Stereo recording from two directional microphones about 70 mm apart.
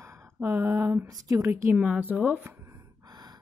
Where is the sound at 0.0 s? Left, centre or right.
Right.